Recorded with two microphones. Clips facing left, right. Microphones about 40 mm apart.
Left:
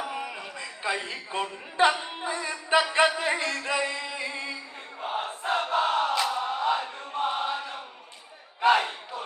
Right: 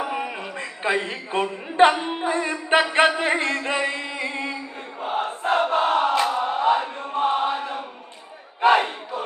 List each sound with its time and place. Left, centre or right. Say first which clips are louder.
0.0 s a man's voice: right 6 dB; right
3.2 s music: right 5 dB; right
5.0 s crowd: right 6 dB; right
7.0 s choir: right 6 dB; right
8.6 s battle cry: right 4 dB; right